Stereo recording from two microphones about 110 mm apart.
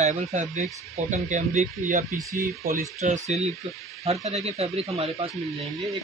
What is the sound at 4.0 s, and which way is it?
Speech, 75° right (ahead or behind).